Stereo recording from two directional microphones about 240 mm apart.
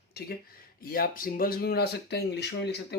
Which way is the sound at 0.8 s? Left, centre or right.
Left.